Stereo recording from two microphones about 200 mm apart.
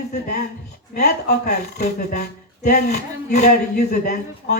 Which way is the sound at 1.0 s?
50° left (ahead or behind).